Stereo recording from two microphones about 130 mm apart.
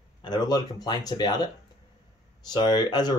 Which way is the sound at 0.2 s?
35° left (ahead or behind).